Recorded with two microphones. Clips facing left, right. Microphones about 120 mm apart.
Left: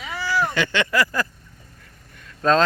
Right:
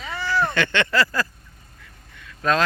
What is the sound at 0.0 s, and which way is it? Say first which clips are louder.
Speech: even; 10° left (ahead or behind).